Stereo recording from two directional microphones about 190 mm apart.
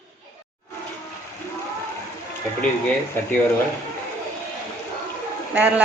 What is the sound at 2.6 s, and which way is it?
Speech, 5° left (ahead or behind).